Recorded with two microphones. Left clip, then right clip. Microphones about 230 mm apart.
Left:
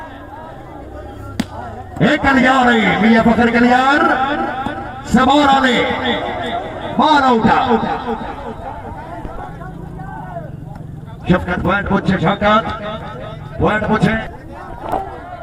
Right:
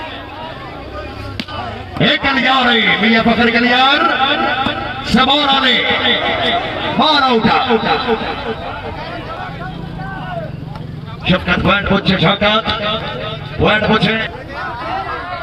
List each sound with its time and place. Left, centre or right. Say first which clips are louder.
2.0 s a man's voice: even; right
11.3 s a man's voice: right 3 dB; right